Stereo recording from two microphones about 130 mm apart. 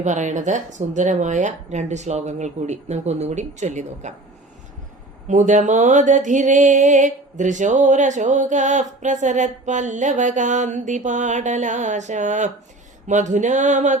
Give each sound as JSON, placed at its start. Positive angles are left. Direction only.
{"t": 0.0, "sound": "speech", "side_deg": -70}
{"t": 5.3, "sound": "mantra", "side_deg": -70}